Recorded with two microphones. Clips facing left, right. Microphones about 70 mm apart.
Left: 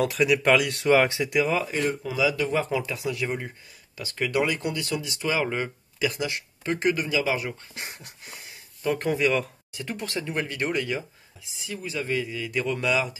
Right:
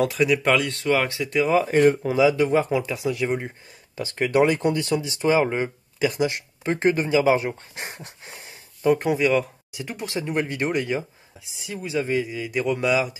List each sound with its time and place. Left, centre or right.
0.0 s speech: centre
1.6 s speech: right
2.3 s speech: right
8.9 s speech: centre